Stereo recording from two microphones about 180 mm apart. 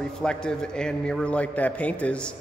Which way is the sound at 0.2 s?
5° left (ahead or behind).